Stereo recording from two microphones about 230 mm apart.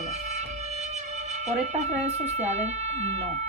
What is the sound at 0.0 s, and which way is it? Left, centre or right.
Speech, right.